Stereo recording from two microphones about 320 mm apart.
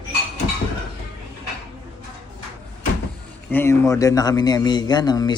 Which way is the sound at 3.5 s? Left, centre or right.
Centre.